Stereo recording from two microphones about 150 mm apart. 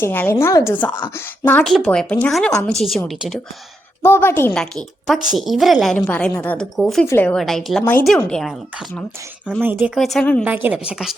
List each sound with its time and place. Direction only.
0.0 s a woman's voice: 15° left (ahead or behind)
4.0 s a woman's voice: 15° left (ahead or behind)
4.5 s a woman's voice: 5° left (ahead or behind)
7.3 s a woman's voice: centre (ahead or behind)
9.5 s a woman's voice: 15° right (ahead or behind)
10.0 s a woman's voice: centre (ahead or behind)
10.4 s a woman's voice: 10° right (ahead or behind)